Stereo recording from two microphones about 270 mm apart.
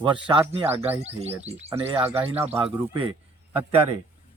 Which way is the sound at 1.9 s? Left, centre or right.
Centre.